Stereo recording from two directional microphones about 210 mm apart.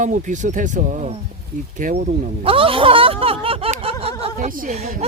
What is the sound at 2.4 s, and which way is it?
Speech, 25° right (ahead or behind).